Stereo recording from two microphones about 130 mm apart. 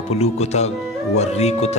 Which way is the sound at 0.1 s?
55° left (ahead or behind).